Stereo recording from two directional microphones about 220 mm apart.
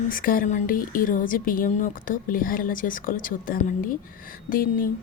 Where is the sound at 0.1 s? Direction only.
40° left (ahead or behind).